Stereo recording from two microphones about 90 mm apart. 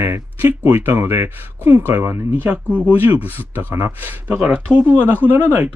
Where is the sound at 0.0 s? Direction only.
30° right (ahead or behind).